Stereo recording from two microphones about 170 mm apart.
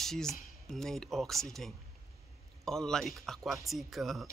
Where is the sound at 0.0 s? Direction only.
Centre (ahead or behind).